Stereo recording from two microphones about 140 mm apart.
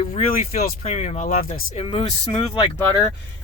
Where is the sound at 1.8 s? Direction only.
40° left (ahead or behind).